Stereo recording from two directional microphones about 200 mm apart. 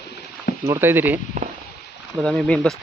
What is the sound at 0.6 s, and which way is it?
Speech, 10° right (ahead or behind).